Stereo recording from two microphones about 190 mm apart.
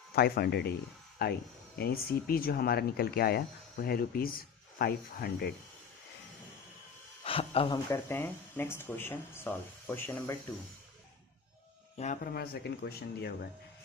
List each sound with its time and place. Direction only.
0.2 s speech: 55° left (ahead or behind)
7.3 s speech: 30° left (ahead or behind); by 10.3 s 15° left (ahead or behind)
12.2 s speech: 55° left (ahead or behind)